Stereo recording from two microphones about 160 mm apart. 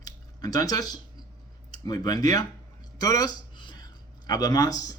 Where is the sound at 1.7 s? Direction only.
25° left (ahead or behind).